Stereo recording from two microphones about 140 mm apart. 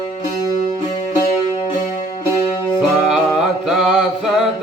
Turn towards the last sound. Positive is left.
turn(degrees=0)  # may be behind; listen again after turning